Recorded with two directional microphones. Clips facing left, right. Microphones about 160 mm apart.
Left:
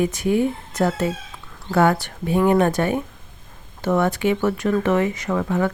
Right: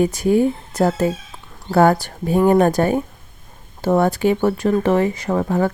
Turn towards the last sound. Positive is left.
turn(degrees=-35)  # may be behind; listen again after turning